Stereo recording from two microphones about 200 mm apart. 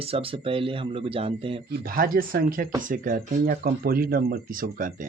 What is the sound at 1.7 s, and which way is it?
Speech, 50° right (ahead or behind).